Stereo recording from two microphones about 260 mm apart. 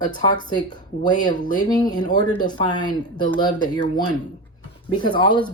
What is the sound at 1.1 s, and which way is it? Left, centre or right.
Speech, centre.